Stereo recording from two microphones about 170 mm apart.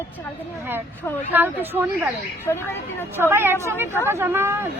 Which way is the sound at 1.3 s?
10° right (ahead or behind).